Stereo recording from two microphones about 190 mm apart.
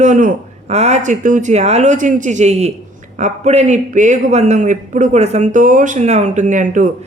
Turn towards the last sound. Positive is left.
turn(degrees=-40)  # may be behind; listen again after turning